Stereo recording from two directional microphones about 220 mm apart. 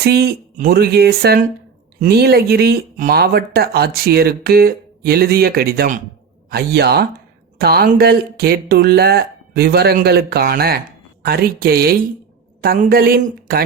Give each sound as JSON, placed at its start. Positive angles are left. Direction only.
{"t": 0.0, "sound": "speech", "side_deg": -45}